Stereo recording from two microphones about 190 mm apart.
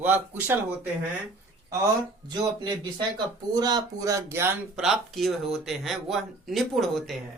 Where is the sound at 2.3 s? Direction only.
20° right (ahead or behind); by 7.2 s centre (ahead or behind).